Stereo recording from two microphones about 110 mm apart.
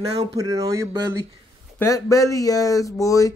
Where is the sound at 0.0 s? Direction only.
65° right (ahead or behind).